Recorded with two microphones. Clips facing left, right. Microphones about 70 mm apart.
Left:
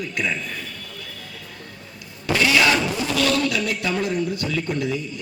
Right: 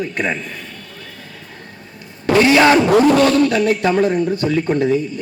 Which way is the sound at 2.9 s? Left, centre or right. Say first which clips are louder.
Right 14 dB; right.